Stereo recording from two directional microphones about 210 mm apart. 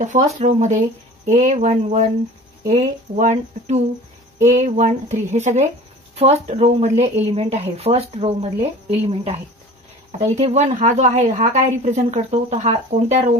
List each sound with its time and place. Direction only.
0.0 s a woman's voice: 35° right (ahead or behind)